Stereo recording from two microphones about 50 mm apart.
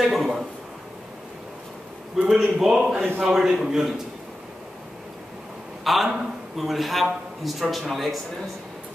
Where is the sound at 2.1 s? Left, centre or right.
Centre.